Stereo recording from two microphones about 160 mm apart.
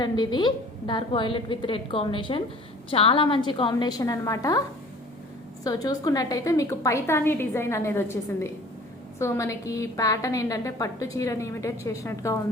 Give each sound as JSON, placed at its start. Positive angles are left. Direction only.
{"t": 0.0, "sound": "a woman's voice", "side_deg": 25}
{"t": 5.6, "sound": "a woman's voice", "side_deg": 25}